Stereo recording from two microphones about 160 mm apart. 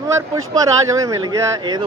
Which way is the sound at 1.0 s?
20° right (ahead or behind).